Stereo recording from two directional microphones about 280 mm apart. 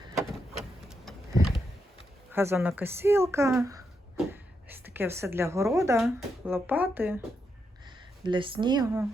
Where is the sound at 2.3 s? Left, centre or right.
Centre.